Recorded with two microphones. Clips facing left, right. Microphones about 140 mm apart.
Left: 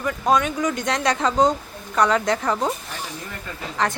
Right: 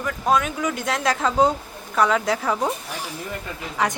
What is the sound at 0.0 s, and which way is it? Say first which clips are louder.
A woman's voice: left 1 dB; centre (ahead or behind).